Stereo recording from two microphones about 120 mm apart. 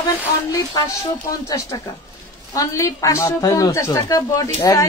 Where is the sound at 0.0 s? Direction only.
30° left (ahead or behind).